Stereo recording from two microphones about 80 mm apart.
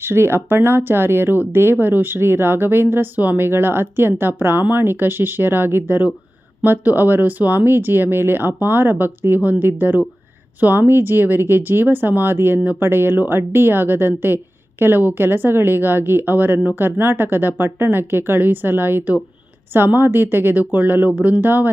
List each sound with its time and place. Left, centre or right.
0.0 s a woman's voice: right